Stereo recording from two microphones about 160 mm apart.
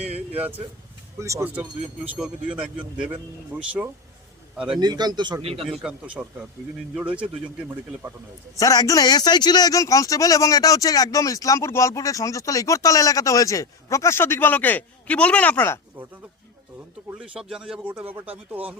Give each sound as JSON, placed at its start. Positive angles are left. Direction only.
{"t": 1.2, "sound": "speech", "side_deg": -15}
{"t": 4.7, "sound": "a man's voice", "side_deg": -25}
{"t": 5.7, "sound": "speech", "side_deg": -5}
{"t": 8.5, "sound": "a man's voice", "side_deg": 20}
{"t": 17.1, "sound": "speech", "side_deg": -5}